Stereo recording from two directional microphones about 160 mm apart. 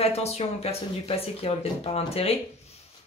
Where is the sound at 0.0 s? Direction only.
40° left (ahead or behind).